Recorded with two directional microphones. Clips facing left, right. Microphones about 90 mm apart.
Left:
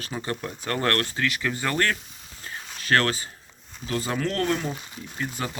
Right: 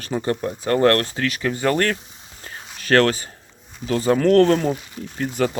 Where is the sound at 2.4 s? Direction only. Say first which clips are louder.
Even; 40° right (ahead or behind).